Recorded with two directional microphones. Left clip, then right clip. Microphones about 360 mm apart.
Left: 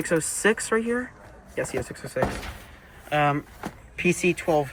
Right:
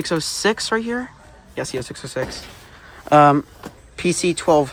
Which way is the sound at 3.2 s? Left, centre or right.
Centre.